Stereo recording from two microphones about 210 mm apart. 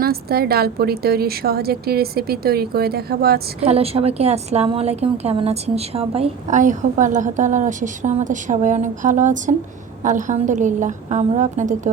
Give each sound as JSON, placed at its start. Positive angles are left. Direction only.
{"t": 0.0, "sound": "a woman's voice", "side_deg": -45}
{"t": 3.6, "sound": "a woman's voice", "side_deg": -30}